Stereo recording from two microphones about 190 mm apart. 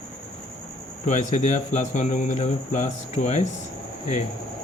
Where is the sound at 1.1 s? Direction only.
40° left (ahead or behind).